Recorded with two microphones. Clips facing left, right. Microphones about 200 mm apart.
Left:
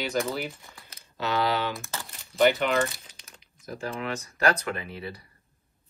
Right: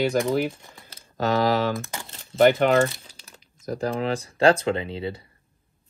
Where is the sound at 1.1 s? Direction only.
45° right (ahead or behind).